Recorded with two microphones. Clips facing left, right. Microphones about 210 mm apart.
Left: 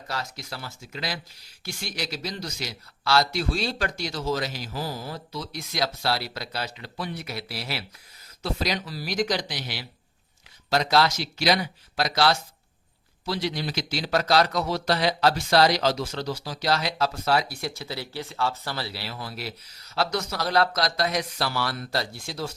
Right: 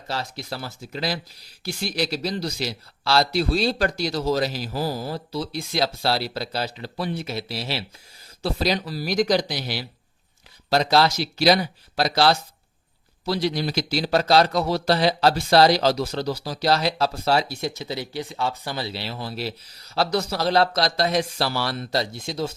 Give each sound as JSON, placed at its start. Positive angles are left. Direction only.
{"t": 0.1, "sound": "a man's voice", "side_deg": -30}